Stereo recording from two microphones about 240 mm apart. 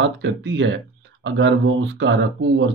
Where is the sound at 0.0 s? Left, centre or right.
Right.